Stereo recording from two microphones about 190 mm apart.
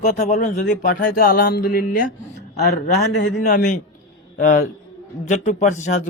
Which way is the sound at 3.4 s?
40° left (ahead or behind).